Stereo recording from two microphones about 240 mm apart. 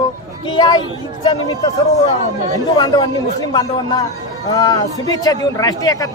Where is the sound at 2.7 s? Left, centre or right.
Centre.